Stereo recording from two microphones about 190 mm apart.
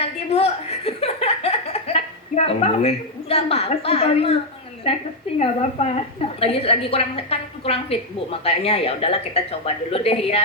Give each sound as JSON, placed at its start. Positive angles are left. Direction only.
{"t": 0.0, "sound": "a woman's voice", "side_deg": 30}